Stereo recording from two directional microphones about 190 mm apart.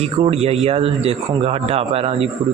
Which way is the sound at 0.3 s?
30° right (ahead or behind).